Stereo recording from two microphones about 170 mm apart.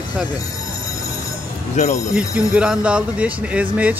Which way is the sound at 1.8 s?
45° left (ahead or behind).